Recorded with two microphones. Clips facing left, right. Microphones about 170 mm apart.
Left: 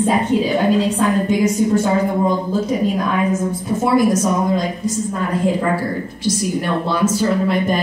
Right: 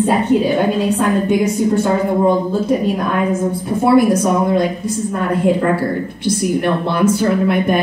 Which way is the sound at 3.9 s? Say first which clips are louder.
Right 2 dB; 60° right (ahead or behind).